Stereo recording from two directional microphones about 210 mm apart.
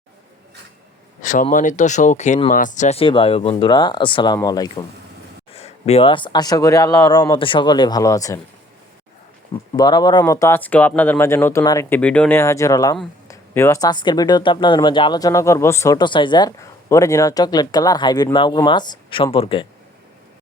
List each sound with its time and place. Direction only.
1.2 s speech: 35° left (ahead or behind); by 4.9 s 20° left (ahead or behind)
5.5 s speech: 30° left (ahead or behind)
9.7 s speech: 20° left (ahead or behind)